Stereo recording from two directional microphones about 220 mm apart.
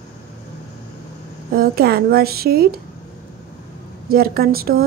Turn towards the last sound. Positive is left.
turn(degrees=-40)  # may be behind; listen again after turning